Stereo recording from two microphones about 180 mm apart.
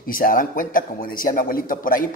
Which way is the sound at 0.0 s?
50° left (ahead or behind).